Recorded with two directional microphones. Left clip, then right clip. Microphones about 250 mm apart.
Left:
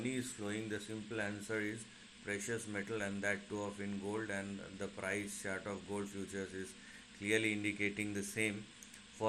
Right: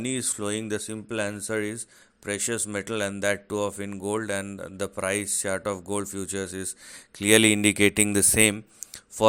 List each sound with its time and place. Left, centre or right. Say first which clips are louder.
0.0 s speech: right 12 dB; right
7.2 s speech: right 16 dB; right